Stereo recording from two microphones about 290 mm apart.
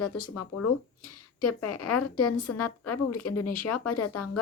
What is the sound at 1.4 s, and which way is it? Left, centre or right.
A woman's voice, left.